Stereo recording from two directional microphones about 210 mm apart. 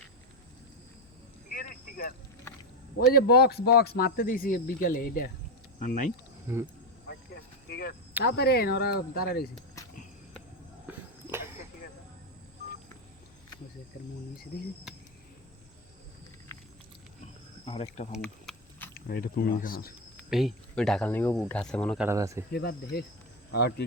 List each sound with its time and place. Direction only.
1.5 s vehicle: 40° left (ahead or behind)
3.1 s speech: 45° left (ahead or behind)
7.1 s a sound: 50° left (ahead or behind)
8.2 s speech: 50° left (ahead or behind)
10.8 s a sound: 10° right (ahead or behind)
16.5 s a sound: 10° left (ahead or behind)
17.7 s speech: 30° left (ahead or behind)
18.2 s a sound: 5° left (ahead or behind)
18.9 s speech: 45° left (ahead or behind)
20.3 s speech: centre (ahead or behind)
22.0 s speech: 15° right (ahead or behind)
22.5 s speech: 50° left (ahead or behind)